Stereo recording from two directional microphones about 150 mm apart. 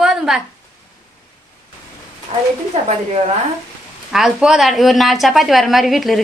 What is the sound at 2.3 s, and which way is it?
Speech, 45° right (ahead or behind).